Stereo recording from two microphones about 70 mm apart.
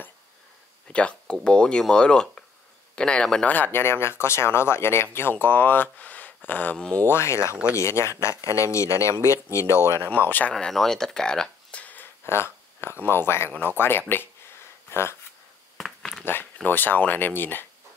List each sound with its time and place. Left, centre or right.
0.9 s speech: centre
3.4 s speech: left
7.1 s speech: left
10.0 s speech: left
10.5 s speech: centre
11.8 s a sound: left
12.3 s speech: left
15.8 s a sound: centre
16.6 s speech: left